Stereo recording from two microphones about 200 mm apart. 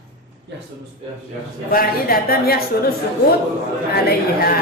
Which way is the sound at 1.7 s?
45° left (ahead or behind).